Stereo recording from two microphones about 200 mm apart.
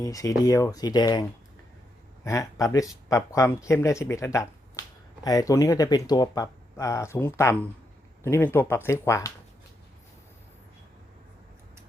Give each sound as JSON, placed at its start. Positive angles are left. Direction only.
{"t": 0.0, "sound": "speech", "side_deg": 15}
{"t": 2.2, "sound": "speech", "side_deg": 15}